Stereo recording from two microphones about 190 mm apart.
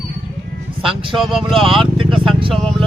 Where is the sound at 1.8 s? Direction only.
25° right (ahead or behind).